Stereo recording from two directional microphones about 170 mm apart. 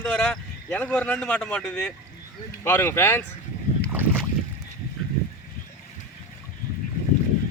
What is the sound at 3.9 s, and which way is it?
Boat, 10° right (ahead or behind).